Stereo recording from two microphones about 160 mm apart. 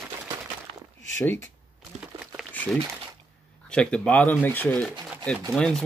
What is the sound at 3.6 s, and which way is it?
Speech, 5° left (ahead or behind).